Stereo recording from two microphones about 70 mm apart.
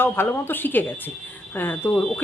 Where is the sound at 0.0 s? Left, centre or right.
Left.